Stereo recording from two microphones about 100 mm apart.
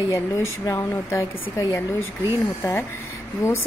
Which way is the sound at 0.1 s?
30° left (ahead or behind).